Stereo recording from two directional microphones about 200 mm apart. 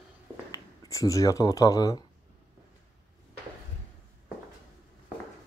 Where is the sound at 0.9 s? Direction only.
15° left (ahead or behind).